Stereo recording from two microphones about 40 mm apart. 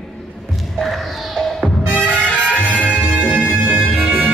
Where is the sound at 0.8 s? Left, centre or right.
Centre.